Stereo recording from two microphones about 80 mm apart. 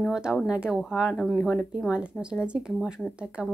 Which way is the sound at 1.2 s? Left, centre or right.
Centre.